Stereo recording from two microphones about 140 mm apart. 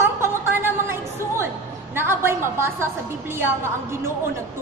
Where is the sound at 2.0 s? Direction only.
15° right (ahead or behind).